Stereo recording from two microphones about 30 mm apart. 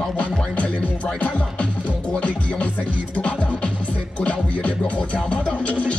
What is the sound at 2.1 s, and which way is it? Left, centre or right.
Speech, left.